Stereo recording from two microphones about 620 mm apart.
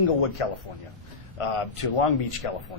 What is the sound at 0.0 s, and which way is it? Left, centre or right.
Speech, left.